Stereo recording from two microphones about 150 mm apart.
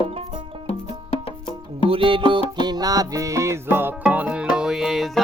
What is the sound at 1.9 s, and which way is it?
Music, 35° right (ahead or behind).